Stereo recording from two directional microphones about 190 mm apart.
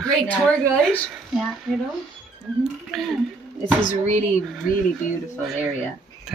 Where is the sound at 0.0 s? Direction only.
5° left (ahead or behind).